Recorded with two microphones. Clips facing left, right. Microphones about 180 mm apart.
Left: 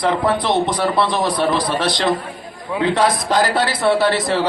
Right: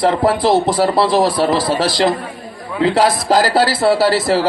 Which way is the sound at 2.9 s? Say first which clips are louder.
Right 4 dB; 35° right (ahead or behind).